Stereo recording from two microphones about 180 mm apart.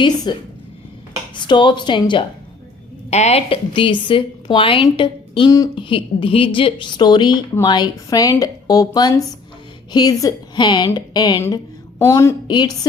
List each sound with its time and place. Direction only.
0.3 s a woman's voice: 25° left (ahead or behind)
3.1 s a woman's voice: 35° left (ahead or behind); by 12.9 s 20° left (ahead or behind)